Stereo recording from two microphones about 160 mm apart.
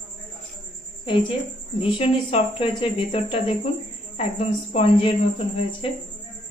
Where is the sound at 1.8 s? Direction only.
35° left (ahead or behind).